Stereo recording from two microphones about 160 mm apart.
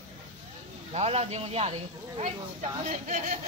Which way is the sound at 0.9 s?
40° right (ahead or behind).